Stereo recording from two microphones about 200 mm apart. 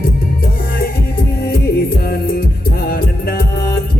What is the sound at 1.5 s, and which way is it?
Music, 50° left (ahead or behind).